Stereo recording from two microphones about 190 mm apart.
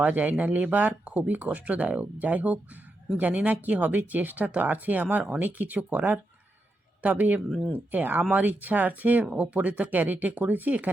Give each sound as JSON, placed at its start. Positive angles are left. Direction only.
{"t": 0.0, "sound": "speech", "side_deg": -10}